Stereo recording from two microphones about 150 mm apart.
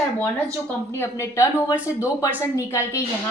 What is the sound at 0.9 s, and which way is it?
A woman's voice, 20° left (ahead or behind).